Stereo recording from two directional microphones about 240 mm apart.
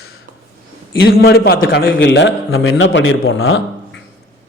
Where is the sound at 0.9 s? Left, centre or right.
Left.